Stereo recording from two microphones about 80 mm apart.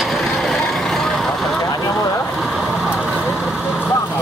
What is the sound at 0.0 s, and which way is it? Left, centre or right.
Vehicle, centre.